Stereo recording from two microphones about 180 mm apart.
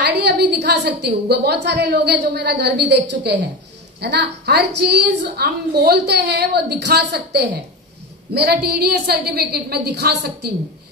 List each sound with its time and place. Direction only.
0.0 s a woman's voice: 70° right (ahead or behind)